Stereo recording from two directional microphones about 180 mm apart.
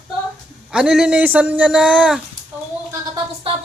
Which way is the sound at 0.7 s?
5° right (ahead or behind).